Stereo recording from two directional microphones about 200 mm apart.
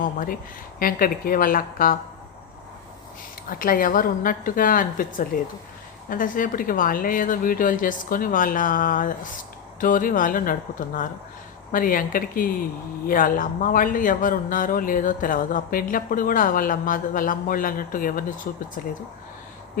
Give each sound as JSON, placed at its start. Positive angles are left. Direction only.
{"t": 0.0, "sound": "speech", "side_deg": 45}
{"t": 3.5, "sound": "speech", "side_deg": 45}